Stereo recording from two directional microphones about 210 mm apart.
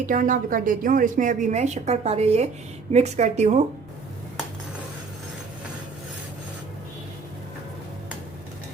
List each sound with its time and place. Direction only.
0.0 s a woman's voice: 40° right (ahead or behind)